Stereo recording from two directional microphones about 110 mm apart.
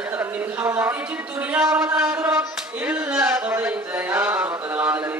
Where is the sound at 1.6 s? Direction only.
25° right (ahead or behind).